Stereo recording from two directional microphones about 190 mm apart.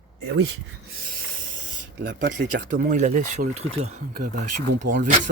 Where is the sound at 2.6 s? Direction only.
45° right (ahead or behind).